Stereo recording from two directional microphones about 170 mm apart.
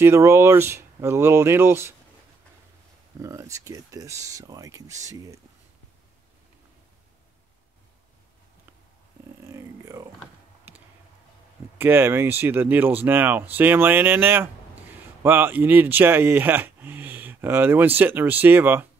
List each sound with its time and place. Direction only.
0.0 s speech: 15° right (ahead or behind)
3.2 s speech: 20° right (ahead or behind)
9.5 s a sound: 15° right (ahead or behind)
11.8 s speech: 15° right (ahead or behind)